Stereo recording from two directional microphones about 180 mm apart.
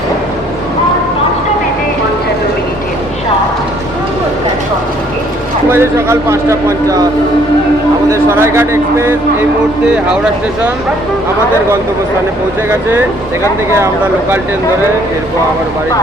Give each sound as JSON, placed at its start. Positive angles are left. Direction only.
{"t": 5.7, "sound": "a man's voice", "side_deg": -15}
{"t": 8.1, "sound": "a man's voice", "side_deg": -15}
{"t": 13.4, "sound": "a man's voice", "side_deg": -15}